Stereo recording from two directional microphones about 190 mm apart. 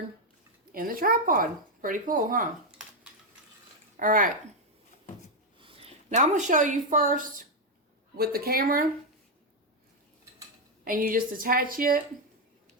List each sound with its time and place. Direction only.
0.7 s speech: 50° right (ahead or behind)
3.9 s speech: 45° right (ahead or behind)
5.5 s a woman's voice: 30° right (ahead or behind); by 8.9 s 50° right (ahead or behind)
10.8 s speech: 45° right (ahead or behind)